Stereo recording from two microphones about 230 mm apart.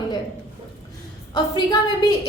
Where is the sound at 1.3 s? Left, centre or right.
Centre.